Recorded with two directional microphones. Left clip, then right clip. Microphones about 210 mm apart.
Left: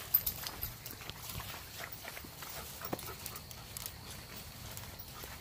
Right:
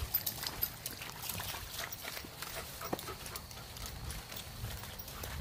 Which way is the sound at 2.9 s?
5° left (ahead or behind).